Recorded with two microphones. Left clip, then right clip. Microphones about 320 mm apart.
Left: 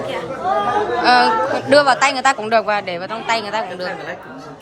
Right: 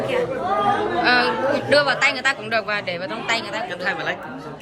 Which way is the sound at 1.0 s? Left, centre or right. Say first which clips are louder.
Left 5 dB; centre.